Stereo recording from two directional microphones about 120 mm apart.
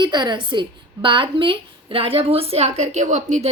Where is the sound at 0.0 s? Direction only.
40° right (ahead or behind).